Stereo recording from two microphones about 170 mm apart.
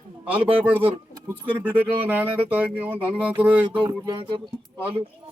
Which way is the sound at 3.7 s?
25° right (ahead or behind).